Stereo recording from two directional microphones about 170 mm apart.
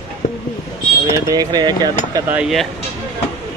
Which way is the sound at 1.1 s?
20° right (ahead or behind).